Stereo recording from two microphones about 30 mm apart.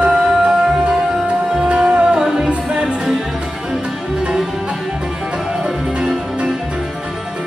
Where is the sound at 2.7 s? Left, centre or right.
Right.